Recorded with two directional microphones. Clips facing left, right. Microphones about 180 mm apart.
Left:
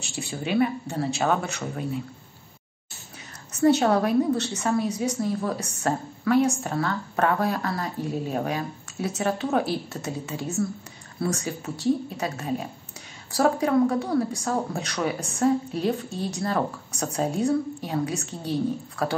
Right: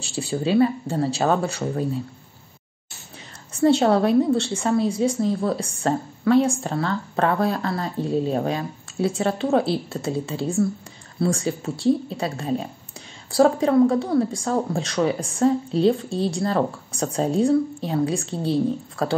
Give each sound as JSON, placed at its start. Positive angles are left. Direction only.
{"t": 0.0, "sound": "speech", "side_deg": -30}
{"t": 3.5, "sound": "a woman's voice", "side_deg": -30}